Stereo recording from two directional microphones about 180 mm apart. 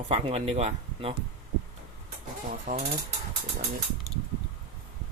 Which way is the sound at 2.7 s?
55° right (ahead or behind).